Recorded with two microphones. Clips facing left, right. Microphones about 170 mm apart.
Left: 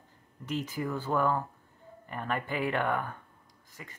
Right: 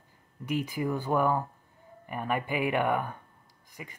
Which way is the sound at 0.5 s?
15° right (ahead or behind).